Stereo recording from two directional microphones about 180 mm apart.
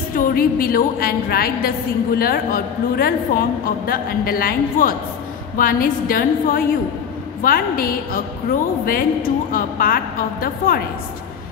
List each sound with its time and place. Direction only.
0.1 s a woman's voice: 50° left (ahead or behind)